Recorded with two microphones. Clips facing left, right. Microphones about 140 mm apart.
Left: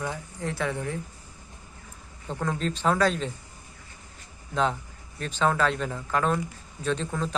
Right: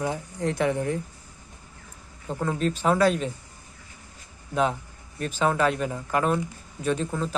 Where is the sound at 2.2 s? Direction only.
10° right (ahead or behind).